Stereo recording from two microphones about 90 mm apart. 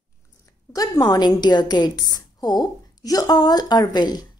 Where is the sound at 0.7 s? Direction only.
45° left (ahead or behind).